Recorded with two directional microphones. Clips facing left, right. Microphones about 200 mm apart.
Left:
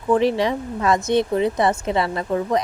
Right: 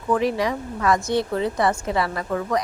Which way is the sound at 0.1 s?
25° left (ahead or behind).